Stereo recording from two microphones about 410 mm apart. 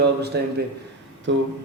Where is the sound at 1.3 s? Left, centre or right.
Right.